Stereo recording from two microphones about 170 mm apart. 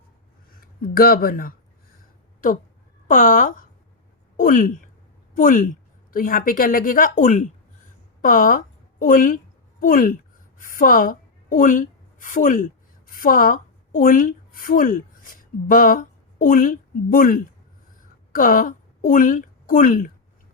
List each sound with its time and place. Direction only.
0.6 s speech: 60° left (ahead or behind)
3.1 s a woman's voice: 50° left (ahead or behind)